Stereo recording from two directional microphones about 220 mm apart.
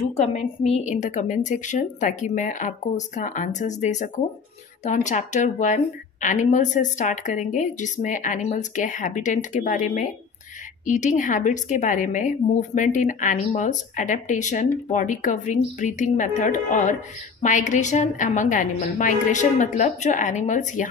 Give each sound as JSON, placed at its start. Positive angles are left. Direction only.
{"t": 0.1, "sound": "a woman's voice", "side_deg": 30}